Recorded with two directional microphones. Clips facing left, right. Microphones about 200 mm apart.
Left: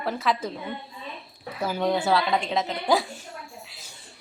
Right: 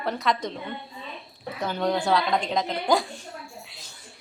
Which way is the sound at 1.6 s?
5° left (ahead or behind).